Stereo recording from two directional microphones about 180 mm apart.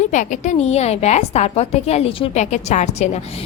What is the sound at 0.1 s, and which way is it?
A woman's voice, 45° left (ahead or behind).